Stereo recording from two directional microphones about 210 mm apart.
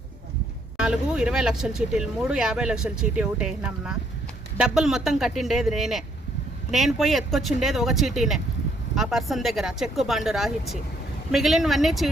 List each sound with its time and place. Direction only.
0.8 s speech: 5° right (ahead or behind)